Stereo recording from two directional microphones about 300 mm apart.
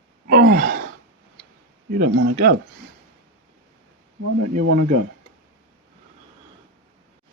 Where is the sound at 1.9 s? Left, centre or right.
Right.